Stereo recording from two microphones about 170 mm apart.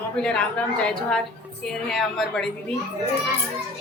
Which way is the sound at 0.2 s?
5° left (ahead or behind).